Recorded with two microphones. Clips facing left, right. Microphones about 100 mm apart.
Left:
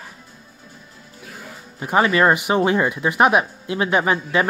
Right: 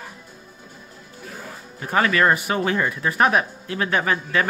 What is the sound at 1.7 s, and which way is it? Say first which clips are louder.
Speech: left 3 dB; 20° left (ahead or behind).